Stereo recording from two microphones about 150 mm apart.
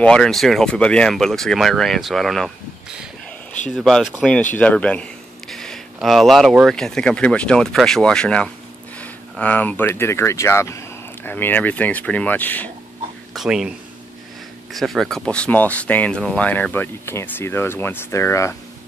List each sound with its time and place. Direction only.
0.0 s a man's voice: 5° left (ahead or behind)
13.3 s speech: 5° right (ahead or behind); by 18.6 s 20° left (ahead or behind)